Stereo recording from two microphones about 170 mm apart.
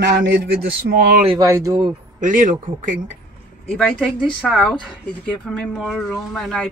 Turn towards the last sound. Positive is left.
turn(degrees=0)  # may be behind; listen again after turning